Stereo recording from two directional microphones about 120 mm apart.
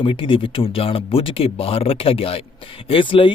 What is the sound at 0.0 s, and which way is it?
Speech, 45° left (ahead or behind).